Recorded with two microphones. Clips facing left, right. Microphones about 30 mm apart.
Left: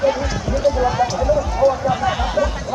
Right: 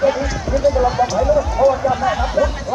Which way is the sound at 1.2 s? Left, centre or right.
Centre.